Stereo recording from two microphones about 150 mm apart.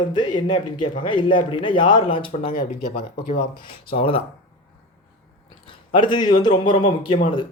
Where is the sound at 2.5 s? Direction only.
70° left (ahead or behind).